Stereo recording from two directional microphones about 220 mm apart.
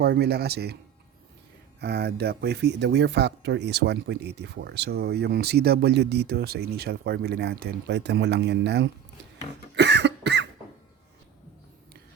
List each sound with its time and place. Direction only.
0.0 s speech: 45° right (ahead or behind)
1.8 s speech: 45° right (ahead or behind)
9.7 s cough: 50° right (ahead or behind)